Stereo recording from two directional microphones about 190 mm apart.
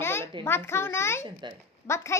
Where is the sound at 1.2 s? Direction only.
25° right (ahead or behind).